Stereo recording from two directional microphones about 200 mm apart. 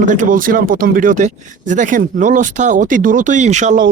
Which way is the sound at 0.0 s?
40° right (ahead or behind).